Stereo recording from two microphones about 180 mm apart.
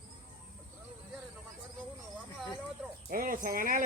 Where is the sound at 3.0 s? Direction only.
50° right (ahead or behind).